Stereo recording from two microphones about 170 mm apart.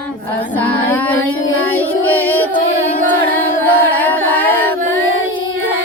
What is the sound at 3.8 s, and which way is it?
Carnatic music, 10° left (ahead or behind).